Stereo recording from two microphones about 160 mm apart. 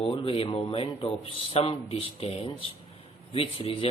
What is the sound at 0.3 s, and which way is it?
Speech, 35° left (ahead or behind).